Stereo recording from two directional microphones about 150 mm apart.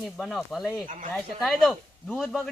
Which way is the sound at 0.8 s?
55° right (ahead or behind).